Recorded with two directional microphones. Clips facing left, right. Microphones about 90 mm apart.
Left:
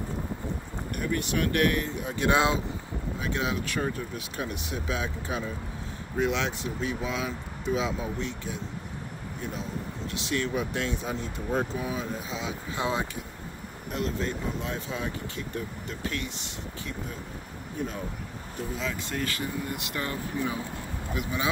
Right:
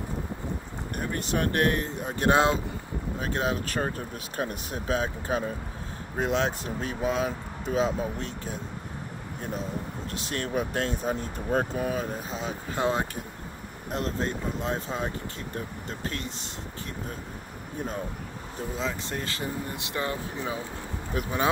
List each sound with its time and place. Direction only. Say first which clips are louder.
0.9 s speech: even; 35° right (ahead or behind)
10.1 s speech: left 1 dB; 45° right (ahead or behind)
18.8 s speech: right 1 dB; 30° right (ahead or behind)
21.1 s speech: right 3 dB; 45° right (ahead or behind)